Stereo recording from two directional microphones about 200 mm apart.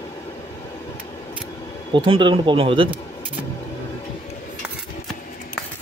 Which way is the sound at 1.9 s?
25° right (ahead or behind).